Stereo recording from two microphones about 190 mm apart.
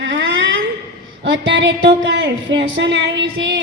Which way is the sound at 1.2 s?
70° right (ahead or behind).